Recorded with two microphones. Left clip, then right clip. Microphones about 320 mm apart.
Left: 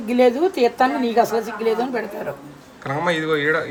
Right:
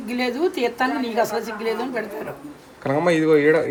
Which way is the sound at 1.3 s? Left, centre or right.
Centre.